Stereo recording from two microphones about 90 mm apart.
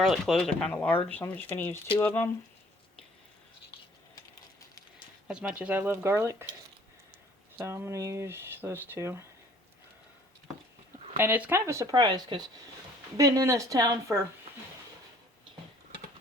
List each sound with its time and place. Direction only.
0.0 s speech: centre (ahead or behind)
0.7 s speech: 20° left (ahead or behind)
5.3 s speech: 15° right (ahead or behind); by 6.3 s 30° right (ahead or behind)
7.6 s speech: 30° right (ahead or behind)
11.2 s speech: 20° right (ahead or behind)
11.5 s speech: 30° right (ahead or behind)
11.9 s speech: 55° right (ahead or behind)
13.1 s speech: 40° right (ahead or behind)